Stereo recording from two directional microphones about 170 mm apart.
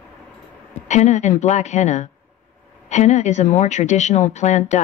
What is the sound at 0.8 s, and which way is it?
Speech, 45° left (ahead or behind).